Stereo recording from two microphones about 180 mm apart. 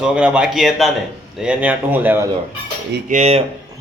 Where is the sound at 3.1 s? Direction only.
35° right (ahead or behind).